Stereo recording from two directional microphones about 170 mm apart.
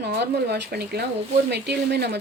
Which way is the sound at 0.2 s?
80° right.